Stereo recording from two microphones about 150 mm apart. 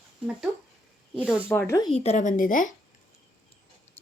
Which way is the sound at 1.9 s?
50° left (ahead or behind).